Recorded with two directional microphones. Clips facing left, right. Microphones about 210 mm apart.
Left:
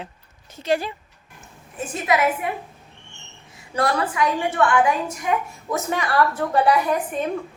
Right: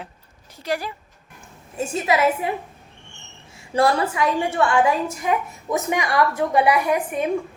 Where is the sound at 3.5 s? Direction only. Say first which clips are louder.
Right 4 dB; 25° right (ahead or behind).